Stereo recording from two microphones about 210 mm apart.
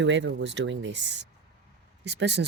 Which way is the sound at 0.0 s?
60° right (ahead or behind).